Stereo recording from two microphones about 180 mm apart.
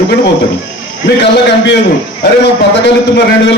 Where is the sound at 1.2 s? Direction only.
70° left (ahead or behind).